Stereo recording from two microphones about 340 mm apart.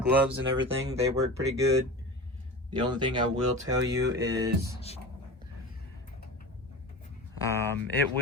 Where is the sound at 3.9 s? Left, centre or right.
Right.